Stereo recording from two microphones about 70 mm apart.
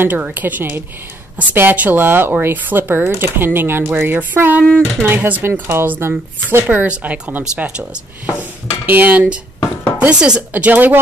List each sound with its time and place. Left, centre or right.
0.0 s speech: right
6.9 s speech: right
8.8 s speech: right